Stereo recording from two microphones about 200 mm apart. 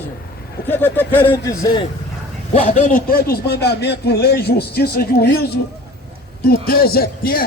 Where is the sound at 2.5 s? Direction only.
35° left (ahead or behind).